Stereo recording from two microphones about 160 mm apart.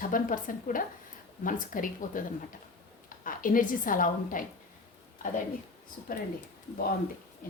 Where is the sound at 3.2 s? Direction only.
60° left (ahead or behind).